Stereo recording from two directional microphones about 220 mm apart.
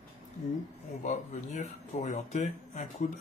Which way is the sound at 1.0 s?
30° left (ahead or behind).